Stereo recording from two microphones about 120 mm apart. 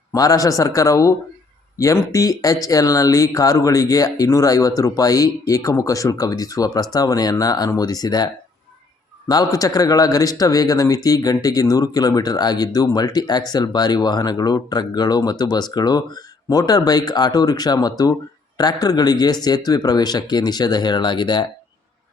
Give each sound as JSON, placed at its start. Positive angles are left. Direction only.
{"t": 0.1, "sound": "speech", "side_deg": 30}